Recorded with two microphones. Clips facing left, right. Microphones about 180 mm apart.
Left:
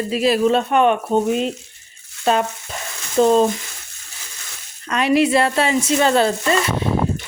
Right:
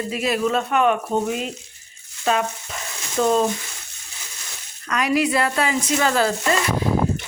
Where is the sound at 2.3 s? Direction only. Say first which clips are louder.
Left 3 dB; 30° left (ahead or behind).